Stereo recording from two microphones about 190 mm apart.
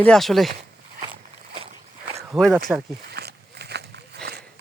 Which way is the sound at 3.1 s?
60° right (ahead or behind).